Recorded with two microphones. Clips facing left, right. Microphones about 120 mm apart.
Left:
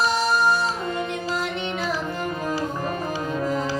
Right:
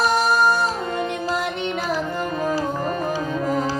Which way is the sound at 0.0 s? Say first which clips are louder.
Right 3 dB; 55° right (ahead or behind).